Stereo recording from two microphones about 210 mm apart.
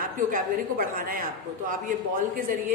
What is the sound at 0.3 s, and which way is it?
Speech, 40° right (ahead or behind).